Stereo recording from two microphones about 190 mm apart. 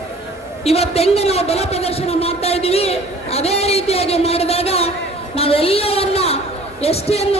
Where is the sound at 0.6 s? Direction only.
35° left (ahead or behind).